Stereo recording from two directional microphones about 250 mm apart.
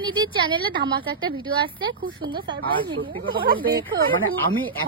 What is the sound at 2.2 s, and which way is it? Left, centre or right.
A woman's voice, centre.